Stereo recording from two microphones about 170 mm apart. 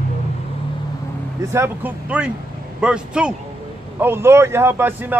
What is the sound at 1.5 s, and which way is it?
A man's voice, 10° right (ahead or behind).